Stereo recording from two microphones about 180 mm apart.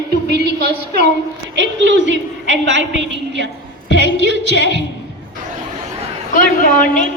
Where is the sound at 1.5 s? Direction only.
90° right.